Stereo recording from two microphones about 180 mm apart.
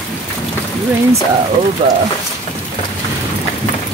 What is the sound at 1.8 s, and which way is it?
Speech, 35° right (ahead or behind).